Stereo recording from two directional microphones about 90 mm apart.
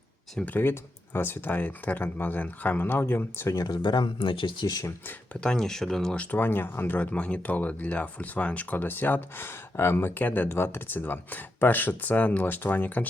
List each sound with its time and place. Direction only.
0.3 s speech: 20° left (ahead or behind); by 3.8 s 40° left (ahead or behind)
3.8 s speech: 60° left (ahead or behind)
5.4 s speech: 5° left (ahead or behind)
6.3 s speech: 25° left (ahead or behind)